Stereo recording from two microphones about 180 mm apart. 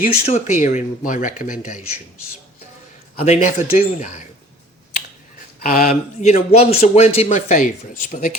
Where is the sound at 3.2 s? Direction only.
40° left (ahead or behind).